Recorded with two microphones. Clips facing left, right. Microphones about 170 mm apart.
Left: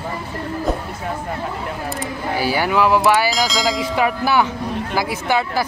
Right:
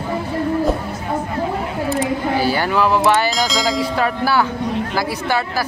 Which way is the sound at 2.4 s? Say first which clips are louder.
Left 2 dB; 10° left (ahead or behind).